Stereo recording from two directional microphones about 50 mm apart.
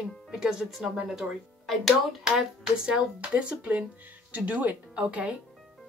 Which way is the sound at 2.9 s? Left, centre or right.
Right.